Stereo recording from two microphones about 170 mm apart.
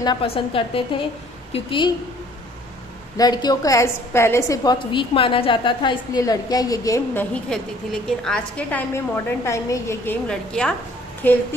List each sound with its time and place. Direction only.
0.0 s a woman's voice: 30° left (ahead or behind)
3.2 s a woman's voice: 20° left (ahead or behind)
7.4 s a woman's voice: 5° left (ahead or behind)